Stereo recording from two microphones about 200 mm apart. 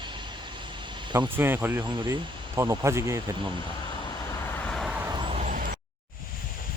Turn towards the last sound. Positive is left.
turn(degrees=-45)  # may be behind; listen again after turning